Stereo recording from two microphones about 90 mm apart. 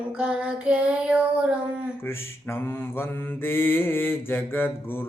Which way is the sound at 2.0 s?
25° left (ahead or behind).